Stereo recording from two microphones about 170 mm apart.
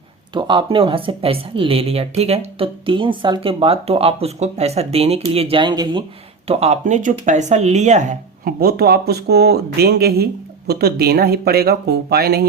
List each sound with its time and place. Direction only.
0.3 s speech: 25° right (ahead or behind)
6.5 s speech: 40° right (ahead or behind)
8.6 s speech: 65° right (ahead or behind)